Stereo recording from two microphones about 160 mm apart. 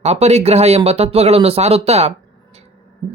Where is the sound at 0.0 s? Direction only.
45° right (ahead or behind).